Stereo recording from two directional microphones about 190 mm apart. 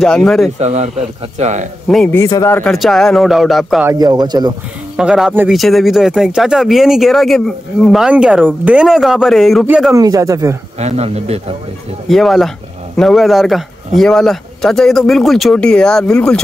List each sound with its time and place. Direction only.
0.0 s speech: 5° left (ahead or behind)
0.6 s speech: 35° right (ahead or behind)
1.9 s speech: centre (ahead or behind)
2.1 s speech: 15° left (ahead or behind)
2.7 s speech: centre (ahead or behind)
3.8 s a man's voice: 20° right (ahead or behind)
4.9 s speech: 5° right (ahead or behind)
9.9 s speech: 20° right (ahead or behind)
10.8 s speech: 35° right (ahead or behind)
12.1 s speech: centre (ahead or behind)